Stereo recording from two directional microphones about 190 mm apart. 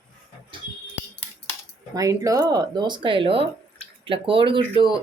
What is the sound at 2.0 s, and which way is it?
Speech, 15° right (ahead or behind).